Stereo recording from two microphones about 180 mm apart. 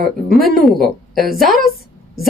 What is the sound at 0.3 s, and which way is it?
A woman's voice, centre (ahead or behind).